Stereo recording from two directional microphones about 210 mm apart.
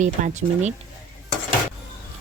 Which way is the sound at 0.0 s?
35° right (ahead or behind).